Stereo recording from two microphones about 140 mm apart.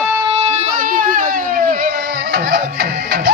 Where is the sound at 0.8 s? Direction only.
70° right (ahead or behind).